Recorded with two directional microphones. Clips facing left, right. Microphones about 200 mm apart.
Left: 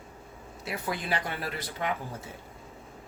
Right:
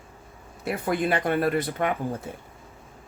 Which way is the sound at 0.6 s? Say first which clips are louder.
Right 8 dB; 55° right (ahead or behind).